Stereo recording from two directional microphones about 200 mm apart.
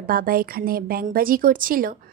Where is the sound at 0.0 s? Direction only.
45° right (ahead or behind).